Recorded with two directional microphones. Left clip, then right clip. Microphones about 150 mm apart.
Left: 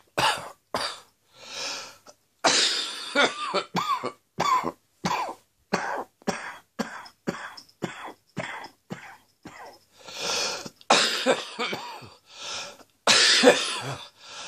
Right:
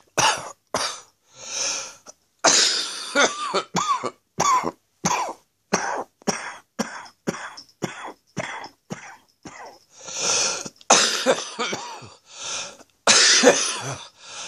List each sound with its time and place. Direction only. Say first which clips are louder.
0.1 s cough: right 4 dB; 40° right (ahead or behind)